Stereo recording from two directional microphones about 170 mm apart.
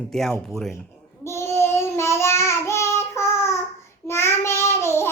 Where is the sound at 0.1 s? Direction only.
Centre (ahead or behind).